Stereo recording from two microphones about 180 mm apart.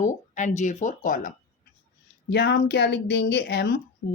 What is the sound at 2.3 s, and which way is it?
A woman's voice, 70° left (ahead or behind).